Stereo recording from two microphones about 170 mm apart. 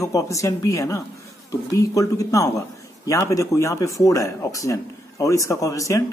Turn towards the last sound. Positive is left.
turn(degrees=20)  # may be behind; listen again after turning